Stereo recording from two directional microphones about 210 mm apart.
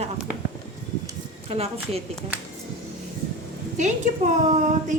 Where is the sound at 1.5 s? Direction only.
30° right (ahead or behind).